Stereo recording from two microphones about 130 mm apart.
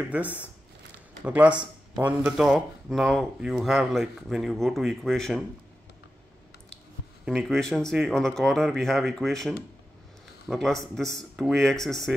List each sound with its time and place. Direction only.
0.0 s speech: 10° right (ahead or behind)
7.2 s speech: centre (ahead or behind)
10.5 s speech: centre (ahead or behind)